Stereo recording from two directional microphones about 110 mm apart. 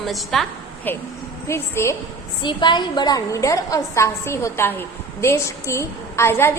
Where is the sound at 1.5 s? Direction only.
25° left (ahead or behind).